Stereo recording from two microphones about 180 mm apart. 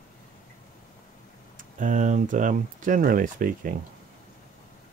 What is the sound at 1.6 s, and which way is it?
Speech, 45° right (ahead or behind).